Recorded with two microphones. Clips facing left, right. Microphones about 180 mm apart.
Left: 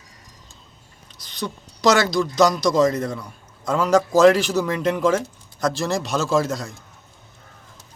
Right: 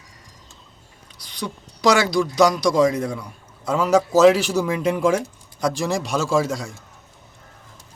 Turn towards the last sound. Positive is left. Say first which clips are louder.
# even
turn(degrees=-10)  # may be behind; listen again after turning